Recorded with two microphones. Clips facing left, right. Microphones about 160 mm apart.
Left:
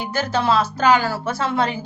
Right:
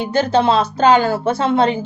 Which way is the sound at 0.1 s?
25° right (ahead or behind).